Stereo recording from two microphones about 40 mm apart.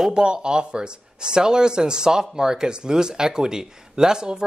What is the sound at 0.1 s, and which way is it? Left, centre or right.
Speech, right.